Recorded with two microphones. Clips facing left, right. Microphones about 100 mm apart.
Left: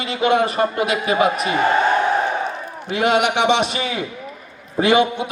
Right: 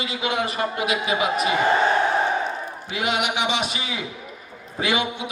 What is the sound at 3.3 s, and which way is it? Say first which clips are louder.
A man's voice: left 7 dB; 55° left (ahead or behind).